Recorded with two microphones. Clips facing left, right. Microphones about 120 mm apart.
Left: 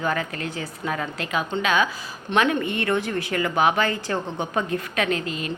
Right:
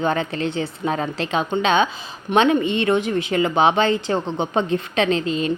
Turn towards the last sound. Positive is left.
turn(degrees=-25)  # may be behind; listen again after turning